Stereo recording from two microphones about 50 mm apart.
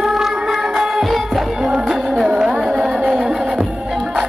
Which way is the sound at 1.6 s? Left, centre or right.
Centre.